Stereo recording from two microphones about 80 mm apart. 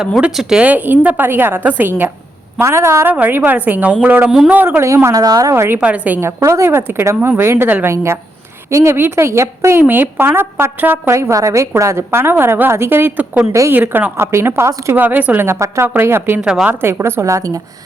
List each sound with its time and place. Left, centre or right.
0.3 s a woman's voice: centre; by 2.0 s right
2.6 s a woman's voice: right
3.1 s a woman's voice: right
5.1 s a woman's voice: right
7.9 s a woman's voice: right
9.8 s a woman's voice: right
11.1 s a woman's voice: right
13.5 s a woman's voice: right
13.7 s a woman's voice: right
14.9 s a woman's voice: right
15.4 s a woman's voice: right
16.4 s a man's voice: centre
16.8 s a woman's voice: right